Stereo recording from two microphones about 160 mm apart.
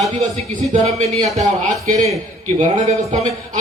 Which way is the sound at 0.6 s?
40° right (ahead or behind).